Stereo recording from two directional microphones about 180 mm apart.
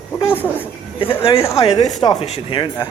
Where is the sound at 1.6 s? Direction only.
35° left (ahead or behind).